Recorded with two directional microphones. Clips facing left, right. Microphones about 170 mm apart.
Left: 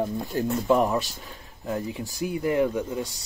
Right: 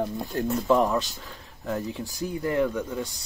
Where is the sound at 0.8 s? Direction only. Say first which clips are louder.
Even; 20° left (ahead or behind).